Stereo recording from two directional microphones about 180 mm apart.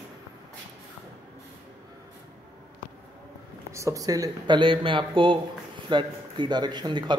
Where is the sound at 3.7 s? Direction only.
20° right (ahead or behind).